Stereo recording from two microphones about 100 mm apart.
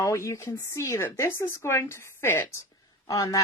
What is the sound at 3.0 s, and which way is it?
Speech, 35° left (ahead or behind).